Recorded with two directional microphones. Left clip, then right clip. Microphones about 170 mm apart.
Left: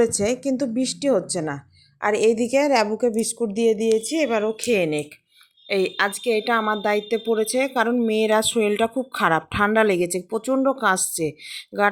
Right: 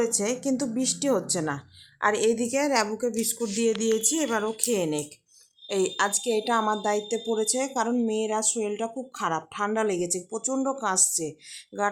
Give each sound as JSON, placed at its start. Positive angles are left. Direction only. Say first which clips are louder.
{"t": 0.0, "sound": "a woman's voice", "louder": "left 6 dB", "side_deg": 25}